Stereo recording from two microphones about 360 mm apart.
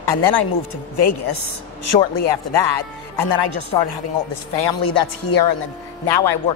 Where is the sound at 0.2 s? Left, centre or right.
Left.